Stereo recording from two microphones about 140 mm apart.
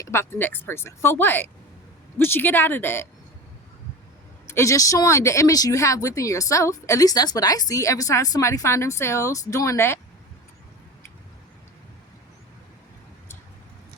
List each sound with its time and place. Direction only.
0.0 s speech: 20° left (ahead or behind)
4.4 s speech: 20° left (ahead or behind)